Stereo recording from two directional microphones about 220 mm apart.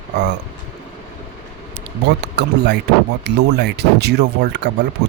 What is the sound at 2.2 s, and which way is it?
Speech, 50° right (ahead or behind).